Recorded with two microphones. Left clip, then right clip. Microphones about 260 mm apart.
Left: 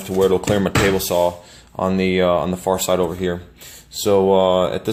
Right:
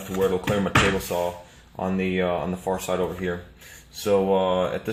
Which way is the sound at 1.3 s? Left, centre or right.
Left.